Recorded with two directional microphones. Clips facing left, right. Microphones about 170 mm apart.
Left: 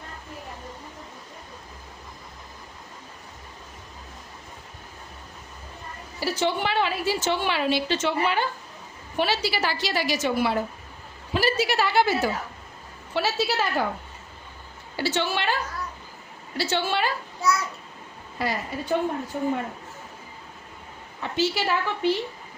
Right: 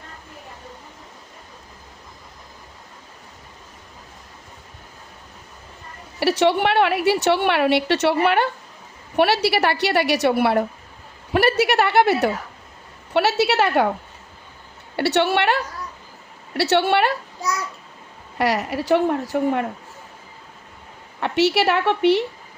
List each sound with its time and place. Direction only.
6.1 s a woman's voice: 70° right (ahead or behind)
14.9 s a woman's voice: 65° right (ahead or behind)
18.3 s a woman's voice: 75° right (ahead or behind)
21.2 s a woman's voice: 70° right (ahead or behind)